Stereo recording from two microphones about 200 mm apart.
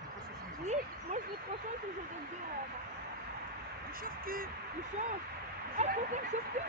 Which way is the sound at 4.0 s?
45° right (ahead or behind).